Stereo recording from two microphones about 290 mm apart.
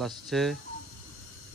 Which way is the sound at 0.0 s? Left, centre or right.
Centre.